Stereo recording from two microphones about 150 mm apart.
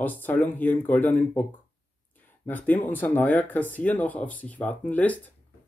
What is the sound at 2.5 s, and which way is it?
Speech, 10° left (ahead or behind).